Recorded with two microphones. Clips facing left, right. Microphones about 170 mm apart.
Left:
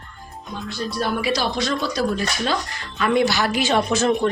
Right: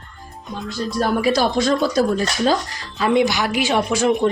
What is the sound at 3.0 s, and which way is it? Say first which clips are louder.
Speech: right 2 dB; 15° right (ahead or behind).